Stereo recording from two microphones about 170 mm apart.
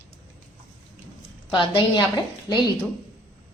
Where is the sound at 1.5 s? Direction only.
25° left (ahead or behind).